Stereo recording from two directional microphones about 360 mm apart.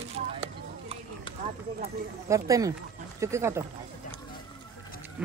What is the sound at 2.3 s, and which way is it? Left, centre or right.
Speech, centre.